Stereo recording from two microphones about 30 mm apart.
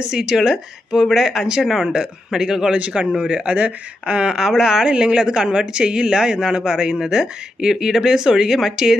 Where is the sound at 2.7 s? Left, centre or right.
Right.